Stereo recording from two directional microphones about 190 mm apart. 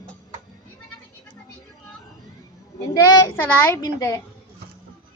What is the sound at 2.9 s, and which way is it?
A child's voice, 15° left (ahead or behind).